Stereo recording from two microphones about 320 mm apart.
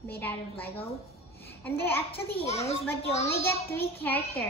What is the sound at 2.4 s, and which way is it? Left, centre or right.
Speech, centre.